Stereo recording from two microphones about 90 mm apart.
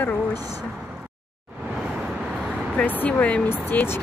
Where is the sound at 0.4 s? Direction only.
45° right (ahead or behind).